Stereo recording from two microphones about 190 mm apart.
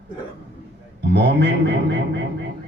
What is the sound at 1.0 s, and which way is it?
A man's voice, 65° right (ahead or behind).